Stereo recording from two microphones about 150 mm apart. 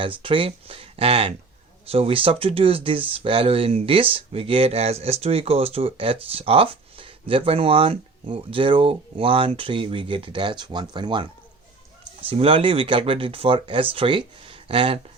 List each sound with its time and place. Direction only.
0.0 s speech: 35° right (ahead or behind)